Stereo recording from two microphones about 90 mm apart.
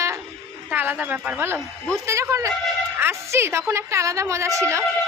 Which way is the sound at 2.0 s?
30° right (ahead or behind).